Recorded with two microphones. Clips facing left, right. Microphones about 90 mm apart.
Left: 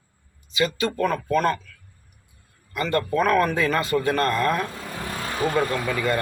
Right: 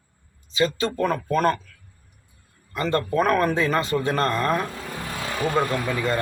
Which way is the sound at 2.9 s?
35° right (ahead or behind).